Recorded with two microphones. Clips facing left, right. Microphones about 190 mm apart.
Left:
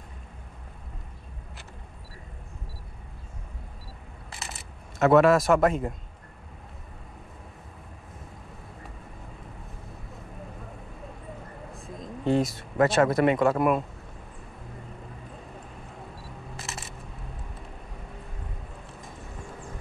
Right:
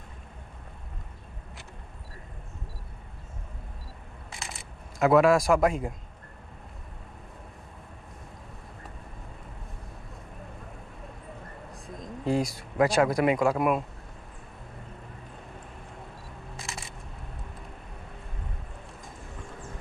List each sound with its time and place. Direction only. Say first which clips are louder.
4.3 s camera: even; centre (ahead or behind)
11.7 s speech: left 1 dB; centre (ahead or behind)
16.5 s a sound: even; centre (ahead or behind)